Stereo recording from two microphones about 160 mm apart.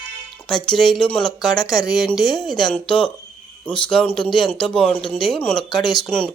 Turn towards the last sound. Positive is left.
turn(degrees=5)  # may be behind; listen again after turning